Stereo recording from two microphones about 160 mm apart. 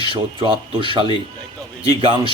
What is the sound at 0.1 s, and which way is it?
Speech, 30° right (ahead or behind).